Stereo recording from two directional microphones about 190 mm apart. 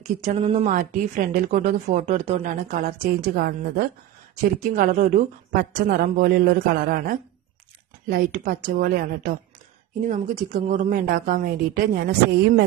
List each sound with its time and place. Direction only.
0.2 s a woman's voice: 35° right (ahead or behind)